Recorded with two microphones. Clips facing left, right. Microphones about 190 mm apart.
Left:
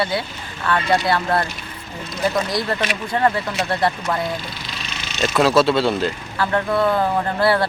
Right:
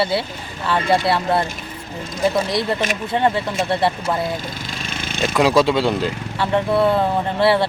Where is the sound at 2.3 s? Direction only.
25° right (ahead or behind).